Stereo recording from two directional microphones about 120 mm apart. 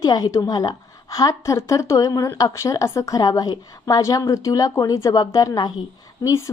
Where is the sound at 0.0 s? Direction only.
30° left (ahead or behind).